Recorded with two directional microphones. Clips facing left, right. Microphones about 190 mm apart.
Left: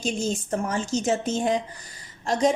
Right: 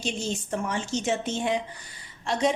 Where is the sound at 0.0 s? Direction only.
45° left (ahead or behind).